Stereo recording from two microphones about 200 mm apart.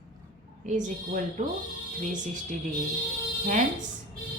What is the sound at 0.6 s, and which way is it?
Speech, 40° right (ahead or behind).